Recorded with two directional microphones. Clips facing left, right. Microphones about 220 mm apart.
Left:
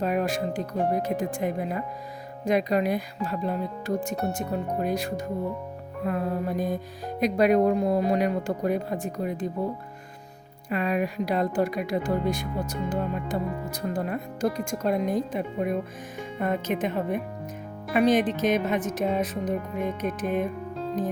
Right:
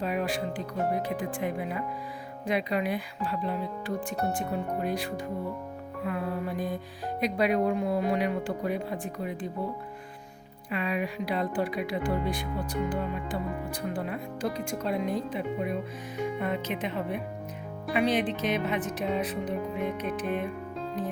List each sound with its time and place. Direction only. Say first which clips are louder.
0.0 s speech: left 4 dB; 45° left (ahead or behind)
10.7 s speech: left 4 dB; 45° left (ahead or behind)